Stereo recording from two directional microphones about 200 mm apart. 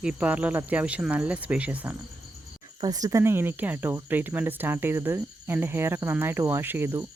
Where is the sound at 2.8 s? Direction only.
20° right (ahead or behind).